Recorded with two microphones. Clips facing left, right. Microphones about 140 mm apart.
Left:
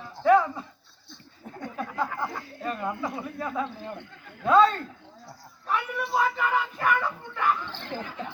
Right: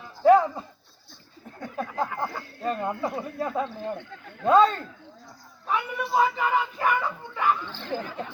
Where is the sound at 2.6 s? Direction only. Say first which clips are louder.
Right 3 dB; 30° right (ahead or behind).